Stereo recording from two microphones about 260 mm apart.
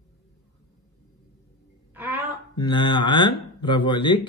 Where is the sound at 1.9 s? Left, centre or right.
Centre.